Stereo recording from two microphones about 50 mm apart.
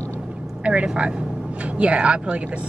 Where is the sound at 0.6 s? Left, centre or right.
Right.